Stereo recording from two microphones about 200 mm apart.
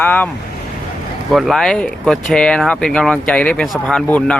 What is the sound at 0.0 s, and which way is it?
Speech, 10° left (ahead or behind).